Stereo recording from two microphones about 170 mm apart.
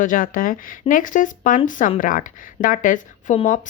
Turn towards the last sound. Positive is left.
turn(degrees=50)  # may be behind; listen again after turning